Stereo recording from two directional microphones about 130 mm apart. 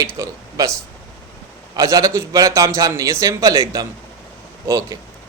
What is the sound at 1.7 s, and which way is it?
Speech, 25° right (ahead or behind).